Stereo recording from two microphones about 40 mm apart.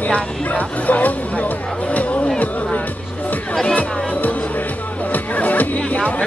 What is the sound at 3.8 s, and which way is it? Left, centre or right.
Music, left.